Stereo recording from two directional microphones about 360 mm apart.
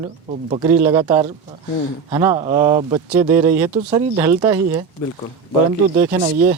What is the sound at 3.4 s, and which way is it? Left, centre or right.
Speech, right.